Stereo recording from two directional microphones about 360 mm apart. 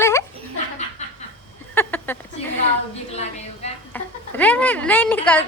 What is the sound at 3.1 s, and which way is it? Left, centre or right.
Speech, centre.